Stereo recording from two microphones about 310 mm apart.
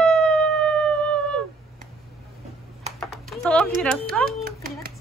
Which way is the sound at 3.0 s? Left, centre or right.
Centre.